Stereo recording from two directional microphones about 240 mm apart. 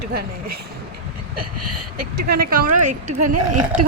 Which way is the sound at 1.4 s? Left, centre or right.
Right.